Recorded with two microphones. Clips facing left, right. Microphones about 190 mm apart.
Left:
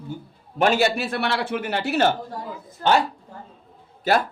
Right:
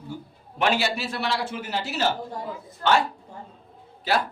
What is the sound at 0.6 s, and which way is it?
A man's voice, 45° left (ahead or behind).